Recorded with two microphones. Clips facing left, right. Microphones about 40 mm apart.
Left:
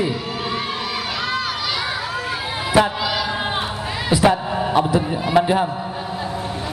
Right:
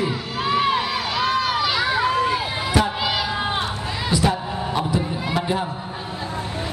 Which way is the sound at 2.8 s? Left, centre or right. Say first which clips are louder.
Left 5 dB; left.